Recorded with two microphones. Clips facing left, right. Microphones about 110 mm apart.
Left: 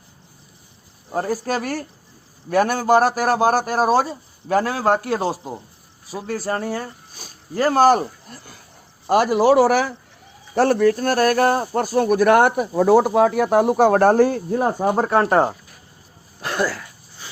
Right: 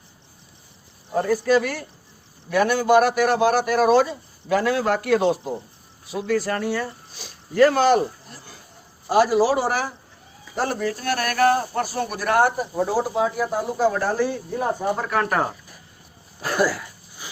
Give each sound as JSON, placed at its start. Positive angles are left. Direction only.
{"t": 1.1, "sound": "a man's voice", "side_deg": 40}
{"t": 9.0, "sound": "speech", "side_deg": 60}
{"t": 10.5, "sound": "speech", "side_deg": 65}
{"t": 16.4, "sound": "dog", "side_deg": -5}